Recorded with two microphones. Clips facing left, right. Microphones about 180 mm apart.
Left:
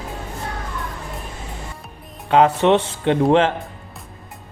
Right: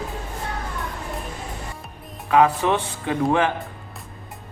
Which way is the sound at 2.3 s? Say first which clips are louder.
Left 4 dB; 25° left (ahead or behind).